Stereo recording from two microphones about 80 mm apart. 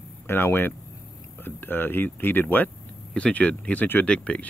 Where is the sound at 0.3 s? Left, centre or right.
Left.